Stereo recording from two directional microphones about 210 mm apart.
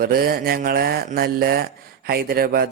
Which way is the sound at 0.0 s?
45° right (ahead or behind).